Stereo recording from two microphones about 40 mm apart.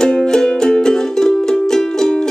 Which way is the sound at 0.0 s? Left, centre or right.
Centre.